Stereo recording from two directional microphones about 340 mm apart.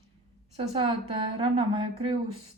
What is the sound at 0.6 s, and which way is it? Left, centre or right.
A woman's voice, centre.